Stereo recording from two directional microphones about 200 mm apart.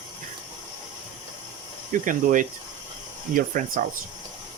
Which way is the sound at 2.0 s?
40° right (ahead or behind).